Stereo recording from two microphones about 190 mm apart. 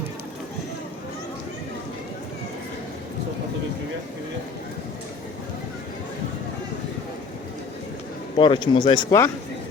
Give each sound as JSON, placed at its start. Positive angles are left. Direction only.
{"t": 8.4, "sound": "speech", "side_deg": 25}